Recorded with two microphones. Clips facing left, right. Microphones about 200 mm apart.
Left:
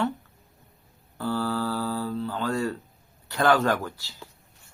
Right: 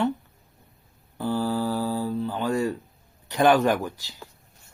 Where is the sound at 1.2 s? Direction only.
15° right (ahead or behind).